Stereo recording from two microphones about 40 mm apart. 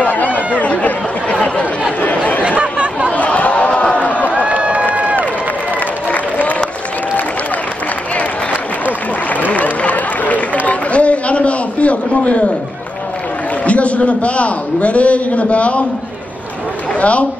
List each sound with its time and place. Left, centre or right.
0.0 s chatter: left
2.6 s chatter: right
3.2 s a sound: left
4.3 s run: right
6.0 s applause: left
9.3 s a sound: left
13.7 s a man's voice: left
17.0 s a woman's voice: left